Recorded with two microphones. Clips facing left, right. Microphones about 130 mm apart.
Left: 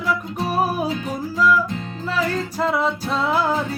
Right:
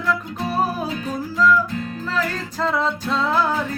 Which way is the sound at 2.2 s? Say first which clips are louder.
Left 2 dB; 10° left (ahead or behind).